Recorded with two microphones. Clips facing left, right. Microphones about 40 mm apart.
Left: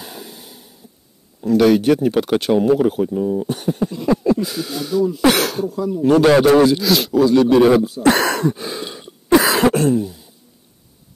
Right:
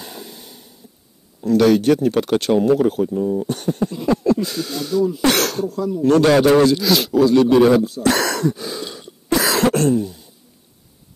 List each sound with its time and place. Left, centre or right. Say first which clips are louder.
0.0 s a sound: even; centre
1.4 s speech: left 1 dB; centre
6.8 s speech: even; centre
8.0 s throat clearing: left 3 dB; left
9.8 s throat clearing: even; centre